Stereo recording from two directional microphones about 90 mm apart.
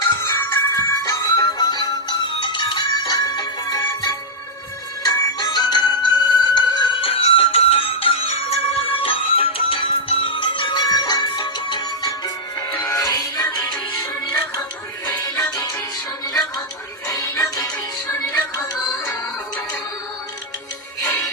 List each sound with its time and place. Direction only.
0.2 s music: 30° left (ahead or behind); by 7.0 s 55° left (ahead or behind)
7.0 s music: 90° left; by 13.6 s 45° left (ahead or behind)
15.2 s music: 45° left (ahead or behind)
17.1 s music: 35° left (ahead or behind)